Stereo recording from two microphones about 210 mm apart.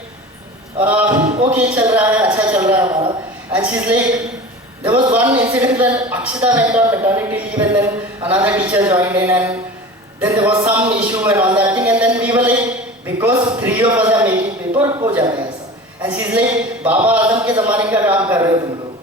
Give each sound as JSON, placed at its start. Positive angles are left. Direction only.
{"t": 0.8, "sound": "a man's voice", "side_deg": -5}
{"t": 5.1, "sound": "speech", "side_deg": -10}